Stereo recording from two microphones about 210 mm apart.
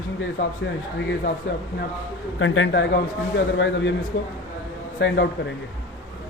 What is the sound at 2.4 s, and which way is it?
A man's voice, 65° left (ahead or behind).